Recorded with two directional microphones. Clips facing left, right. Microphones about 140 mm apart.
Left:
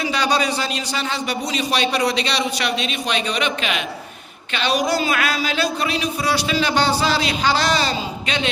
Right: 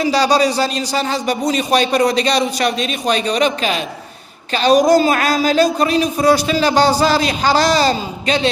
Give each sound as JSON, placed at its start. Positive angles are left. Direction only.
{"t": 0.0, "sound": "speech", "side_deg": -40}